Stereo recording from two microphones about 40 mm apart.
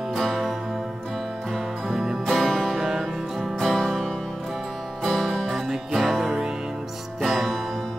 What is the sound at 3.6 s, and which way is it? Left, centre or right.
Music, centre.